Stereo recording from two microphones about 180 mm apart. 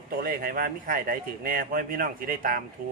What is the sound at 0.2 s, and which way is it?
A man's voice, 55° right (ahead or behind).